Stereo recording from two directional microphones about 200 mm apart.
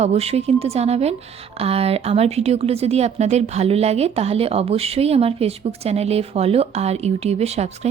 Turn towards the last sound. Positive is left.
turn(degrees=-35)  # may be behind; listen again after turning